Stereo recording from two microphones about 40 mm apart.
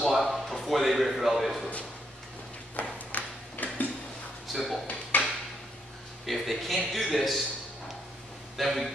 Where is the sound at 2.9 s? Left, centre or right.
Left.